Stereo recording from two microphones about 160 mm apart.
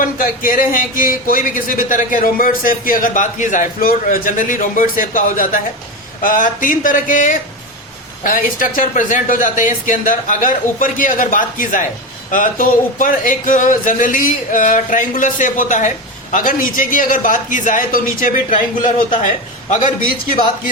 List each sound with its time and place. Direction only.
0.0 s a man's voice: 60° left (ahead or behind)